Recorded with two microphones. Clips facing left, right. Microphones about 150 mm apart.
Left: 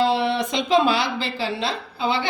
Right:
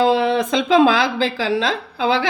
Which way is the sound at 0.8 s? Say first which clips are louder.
Right 6 dB; 90° right.